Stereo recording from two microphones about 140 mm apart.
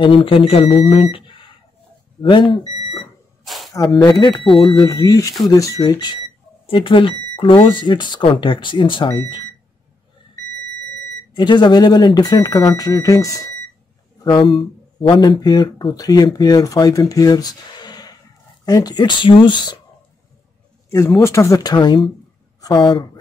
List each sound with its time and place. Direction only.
0.0 s speech: 40° left (ahead or behind)
3.4 s a sound: centre (ahead or behind)
3.9 s speech: 25° left (ahead or behind)
11.3 s speech: 35° left (ahead or behind)
14.2 s speech: 35° left (ahead or behind)
21.2 s speech: 20° left (ahead or behind)